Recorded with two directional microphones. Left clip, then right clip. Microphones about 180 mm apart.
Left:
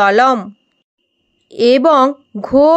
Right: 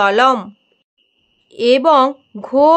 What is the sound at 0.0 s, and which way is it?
Speech, 15° left (ahead or behind).